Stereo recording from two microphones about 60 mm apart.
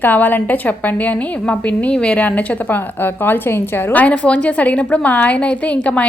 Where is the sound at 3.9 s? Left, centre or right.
Left.